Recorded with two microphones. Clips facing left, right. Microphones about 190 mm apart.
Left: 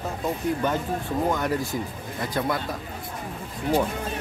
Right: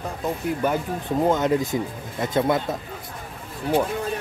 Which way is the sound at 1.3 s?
20° right (ahead or behind).